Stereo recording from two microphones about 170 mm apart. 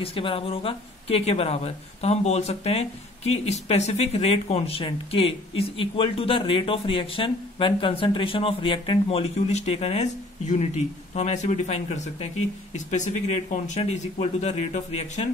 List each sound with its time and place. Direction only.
0.0 s speech: 30° left (ahead or behind)